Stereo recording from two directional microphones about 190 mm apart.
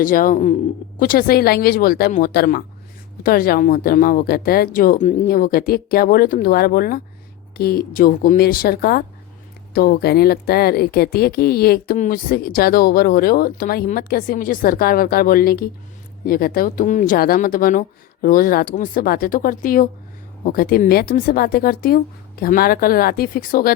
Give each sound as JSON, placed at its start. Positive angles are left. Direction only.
{"t": 0.0, "sound": "speech", "side_deg": 45}